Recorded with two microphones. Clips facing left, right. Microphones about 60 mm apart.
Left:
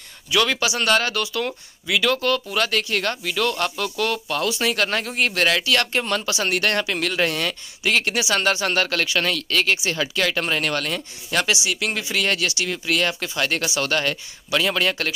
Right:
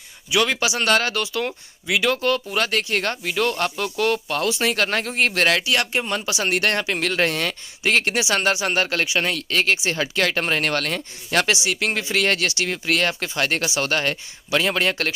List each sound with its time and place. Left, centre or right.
0.3 s speech: right
5.6 s speech: right